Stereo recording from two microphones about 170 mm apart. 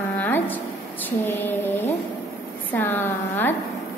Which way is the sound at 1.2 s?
10° left (ahead or behind).